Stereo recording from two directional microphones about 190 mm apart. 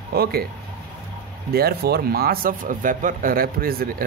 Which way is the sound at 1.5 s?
55° right (ahead or behind).